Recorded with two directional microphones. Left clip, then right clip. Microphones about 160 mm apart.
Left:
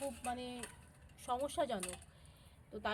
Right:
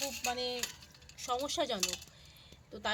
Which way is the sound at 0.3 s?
15° right (ahead or behind).